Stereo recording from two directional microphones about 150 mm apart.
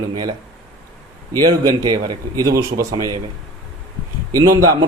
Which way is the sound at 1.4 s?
25° right (ahead or behind).